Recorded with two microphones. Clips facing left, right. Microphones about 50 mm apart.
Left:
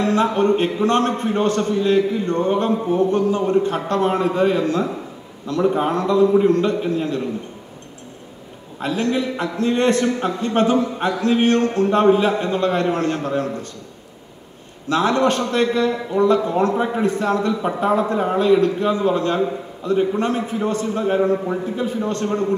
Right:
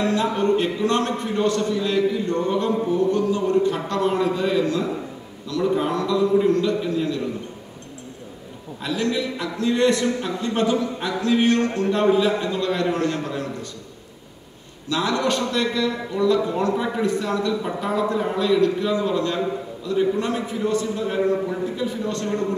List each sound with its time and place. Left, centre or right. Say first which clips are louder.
0.0 s a man's voice: left 3 dB; left
8.8 s a man's voice: left 3 dB; left
14.9 s a man's voice: left 5 dB; left